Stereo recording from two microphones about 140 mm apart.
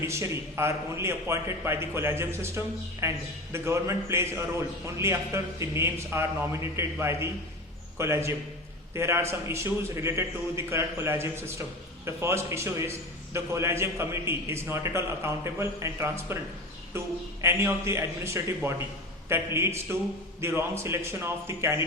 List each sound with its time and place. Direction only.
0.0 s a man's voice: 20° right (ahead or behind)
17.4 s a man's voice: 20° right (ahead or behind)